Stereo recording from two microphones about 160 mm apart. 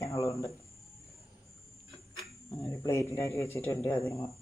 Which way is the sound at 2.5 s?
20° left (ahead or behind).